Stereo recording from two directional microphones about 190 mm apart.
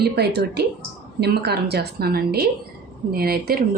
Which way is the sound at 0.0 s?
60° right (ahead or behind).